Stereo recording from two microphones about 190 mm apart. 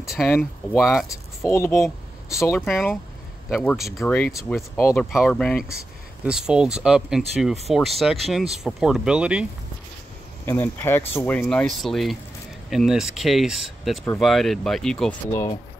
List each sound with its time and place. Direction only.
0.3 s speech: 10° left (ahead or behind)
2.5 s speech: centre (ahead or behind)
10.4 s speech: 10° left (ahead or behind)